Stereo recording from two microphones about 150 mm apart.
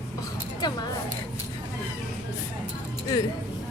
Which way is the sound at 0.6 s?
25° left (ahead or behind).